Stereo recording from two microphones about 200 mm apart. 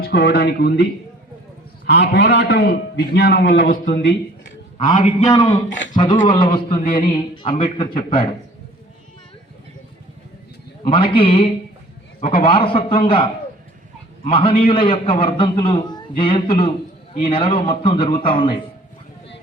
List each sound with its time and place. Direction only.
0.0 s a man's voice: 50° left (ahead or behind)
4.0 s a sound: 60° left (ahead or behind)
5.2 s a man's voice: 20° left (ahead or behind)
10.8 s a man's voice: 25° left (ahead or behind)